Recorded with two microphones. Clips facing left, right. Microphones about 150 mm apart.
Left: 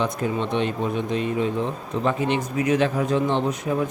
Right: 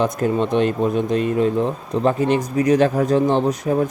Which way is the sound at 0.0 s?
40° right (ahead or behind).